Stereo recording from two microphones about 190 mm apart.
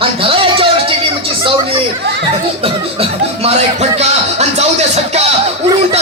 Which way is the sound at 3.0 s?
35° right (ahead or behind).